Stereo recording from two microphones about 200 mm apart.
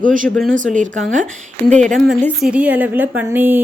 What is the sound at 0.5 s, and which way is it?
Speech, 40° right (ahead or behind).